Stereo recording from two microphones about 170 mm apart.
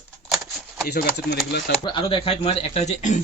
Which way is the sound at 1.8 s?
30° left (ahead or behind).